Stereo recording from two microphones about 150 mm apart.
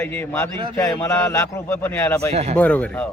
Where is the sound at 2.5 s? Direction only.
10° left (ahead or behind).